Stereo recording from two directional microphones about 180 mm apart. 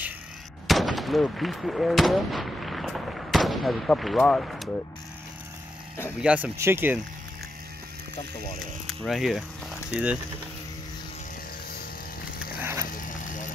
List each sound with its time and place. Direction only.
0.7 s speech: centre (ahead or behind)
6.2 s speech: 10° right (ahead or behind)
8.8 s speech: centre (ahead or behind)
12.9 s vehicle: 45° left (ahead or behind)